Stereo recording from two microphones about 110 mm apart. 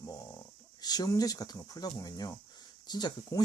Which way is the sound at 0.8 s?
35° left (ahead or behind).